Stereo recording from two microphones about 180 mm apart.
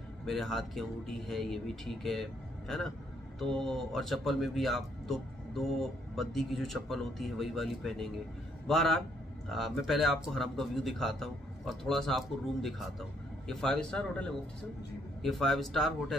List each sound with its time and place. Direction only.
0.2 s speech: centre (ahead or behind)
3.3 s speech: centre (ahead or behind)